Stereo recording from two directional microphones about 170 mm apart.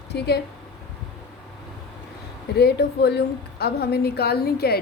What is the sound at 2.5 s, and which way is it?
A woman's voice, 70° left (ahead or behind).